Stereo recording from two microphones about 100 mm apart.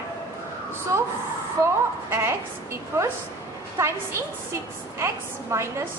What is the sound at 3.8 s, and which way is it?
Speech, 25° right (ahead or behind).